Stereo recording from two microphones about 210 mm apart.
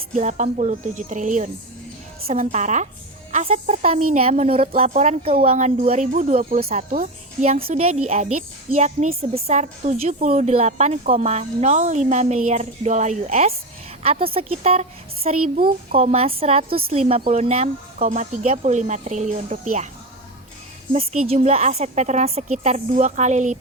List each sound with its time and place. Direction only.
0.1 s a woman's voice: 35° right (ahead or behind)
20.9 s a woman's voice: 30° right (ahead or behind)